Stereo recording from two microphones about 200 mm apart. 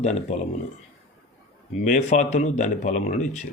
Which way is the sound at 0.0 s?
35° left (ahead or behind).